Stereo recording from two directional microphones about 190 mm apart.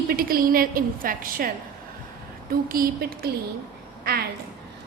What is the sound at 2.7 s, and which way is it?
A woman's voice, 50° right (ahead or behind).